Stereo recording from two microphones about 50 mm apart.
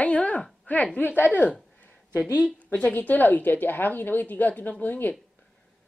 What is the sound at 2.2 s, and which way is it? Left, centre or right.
Speech, right.